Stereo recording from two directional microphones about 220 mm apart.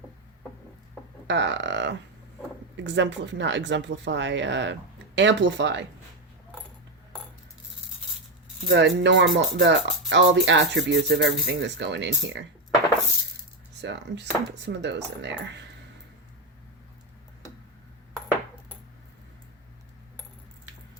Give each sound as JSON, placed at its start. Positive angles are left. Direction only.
{"t": 1.3, "sound": "speech", "side_deg": -55}
{"t": 8.6, "sound": "speech", "side_deg": -55}
{"t": 13.8, "sound": "speech", "side_deg": -55}